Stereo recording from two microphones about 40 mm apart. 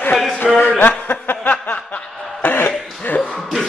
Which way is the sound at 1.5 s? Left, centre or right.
Left.